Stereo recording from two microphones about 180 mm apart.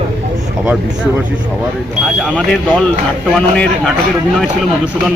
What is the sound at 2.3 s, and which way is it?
Speech, 5° left (ahead or behind).